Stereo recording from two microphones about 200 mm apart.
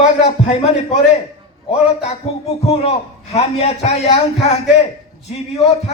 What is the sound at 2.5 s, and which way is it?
A man's voice, 30° left (ahead or behind).